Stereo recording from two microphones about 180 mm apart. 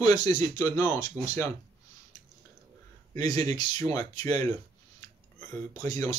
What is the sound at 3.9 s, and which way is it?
Speech, 20° left (ahead or behind).